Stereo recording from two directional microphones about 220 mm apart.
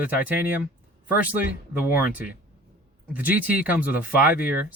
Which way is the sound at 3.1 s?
5° right (ahead or behind).